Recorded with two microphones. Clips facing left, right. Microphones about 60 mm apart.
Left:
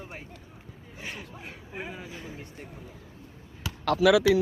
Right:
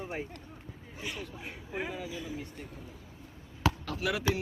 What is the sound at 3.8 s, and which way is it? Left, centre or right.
Speech, left.